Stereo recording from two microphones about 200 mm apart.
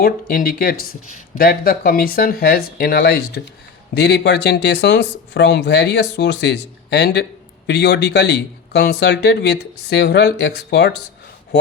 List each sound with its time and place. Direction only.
0.0 s speech: 50° left (ahead or behind)